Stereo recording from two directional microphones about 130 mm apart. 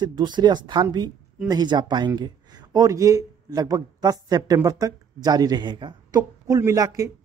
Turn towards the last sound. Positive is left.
turn(degrees=-25)  # may be behind; listen again after turning